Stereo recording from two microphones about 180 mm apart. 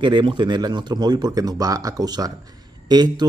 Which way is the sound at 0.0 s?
25° right (ahead or behind).